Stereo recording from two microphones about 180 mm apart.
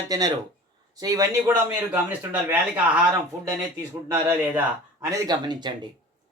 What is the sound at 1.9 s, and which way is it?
Speech, 10° right (ahead or behind).